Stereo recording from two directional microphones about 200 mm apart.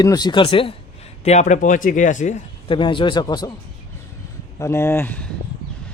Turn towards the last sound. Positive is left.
turn(degrees=10)  # may be behind; listen again after turning